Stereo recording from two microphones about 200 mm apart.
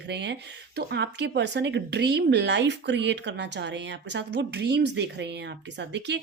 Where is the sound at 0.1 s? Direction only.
60° right (ahead or behind).